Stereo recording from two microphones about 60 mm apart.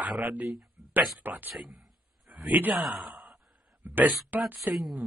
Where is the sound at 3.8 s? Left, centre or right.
Right.